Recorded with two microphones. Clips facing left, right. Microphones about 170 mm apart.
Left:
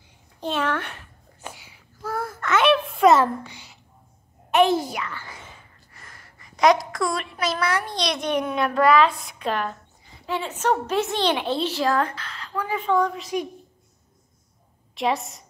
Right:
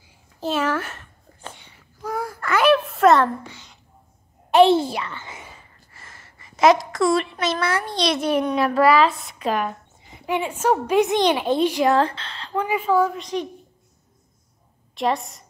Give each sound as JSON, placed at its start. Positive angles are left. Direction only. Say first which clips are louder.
{"t": 0.4, "sound": "a woman's voice", "louder": "right 2 dB", "side_deg": -5}
{"t": 1.4, "sound": "a sound", "louder": "even", "side_deg": 5}
{"t": 3.4, "sound": "a sound", "louder": "right 2 dB", "side_deg": 15}
{"t": 4.5, "sound": "a child's voice", "louder": "right 4 dB", "side_deg": -30}
{"t": 5.4, "sound": "a sound", "louder": "right 2 dB", "side_deg": 0}
{"t": 8.5, "sound": "a woman's voice", "louder": "right 1 dB", "side_deg": 0}
{"t": 10.0, "sound": "a child's voice", "louder": "right 4 dB", "side_deg": -20}
{"t": 11.9, "sound": "speech", "louder": "right 4 dB", "side_deg": -30}
{"t": 12.6, "sound": "a woman's voice", "louder": "right 2 dB", "side_deg": -5}
{"t": 15.0, "sound": "a woman's voice", "louder": "right 1 dB", "side_deg": 0}